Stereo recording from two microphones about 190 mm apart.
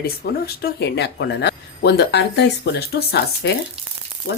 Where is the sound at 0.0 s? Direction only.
55° left (ahead or behind).